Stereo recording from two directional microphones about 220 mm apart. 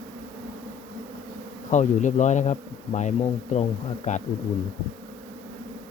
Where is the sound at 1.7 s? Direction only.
35° left (ahead or behind).